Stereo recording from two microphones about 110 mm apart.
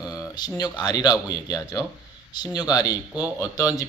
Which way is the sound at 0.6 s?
40° left (ahead or behind).